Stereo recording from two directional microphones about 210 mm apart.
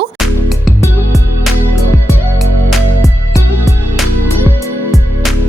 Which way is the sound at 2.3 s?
Centre (ahead or behind).